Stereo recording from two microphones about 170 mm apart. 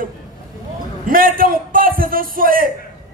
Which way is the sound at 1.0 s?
55° right (ahead or behind).